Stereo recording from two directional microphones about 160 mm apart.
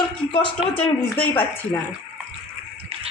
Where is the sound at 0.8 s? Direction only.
10° left (ahead or behind).